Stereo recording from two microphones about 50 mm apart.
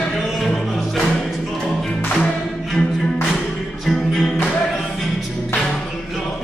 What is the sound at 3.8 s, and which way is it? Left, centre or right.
Music, centre.